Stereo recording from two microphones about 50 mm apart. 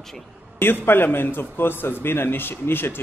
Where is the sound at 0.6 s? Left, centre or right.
Left.